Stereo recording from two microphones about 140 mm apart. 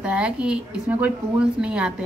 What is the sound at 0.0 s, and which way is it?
A woman's voice, 10° right (ahead or behind).